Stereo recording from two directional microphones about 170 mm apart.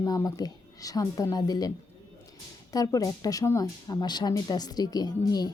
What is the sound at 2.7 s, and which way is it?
A woman's voice, 20° left (ahead or behind).